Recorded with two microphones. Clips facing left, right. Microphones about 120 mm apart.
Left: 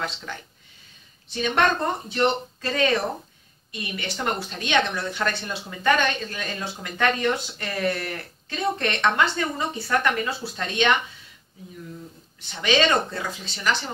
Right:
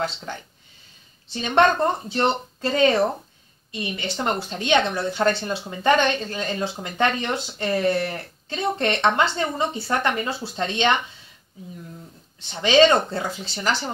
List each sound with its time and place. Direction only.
0.0 s speech: 30° right (ahead or behind)
12.4 s speech: 30° right (ahead or behind)